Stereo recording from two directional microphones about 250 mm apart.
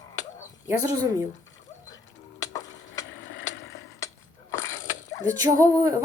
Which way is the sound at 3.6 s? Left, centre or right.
Left.